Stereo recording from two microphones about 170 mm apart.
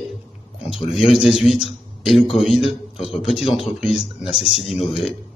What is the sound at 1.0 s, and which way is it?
A man's voice, centre (ahead or behind).